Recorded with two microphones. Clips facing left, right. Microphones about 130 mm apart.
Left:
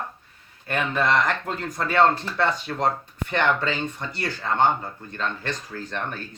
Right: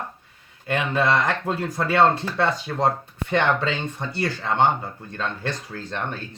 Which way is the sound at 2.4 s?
25° right (ahead or behind).